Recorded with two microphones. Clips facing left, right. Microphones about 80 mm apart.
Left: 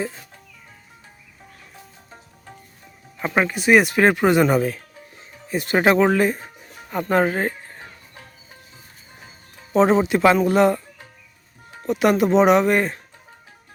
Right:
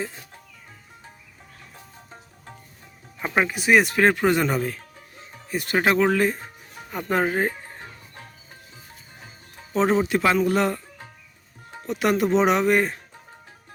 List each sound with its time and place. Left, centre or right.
3.2 s speech: centre
5.5 s speech: left
6.1 s speech: centre
10.0 s speech: left
11.9 s speech: centre